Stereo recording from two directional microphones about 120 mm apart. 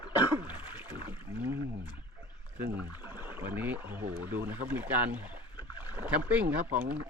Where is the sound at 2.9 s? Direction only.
15° right (ahead or behind).